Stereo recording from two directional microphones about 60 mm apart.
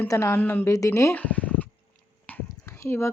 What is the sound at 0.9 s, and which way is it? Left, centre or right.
Speech, left.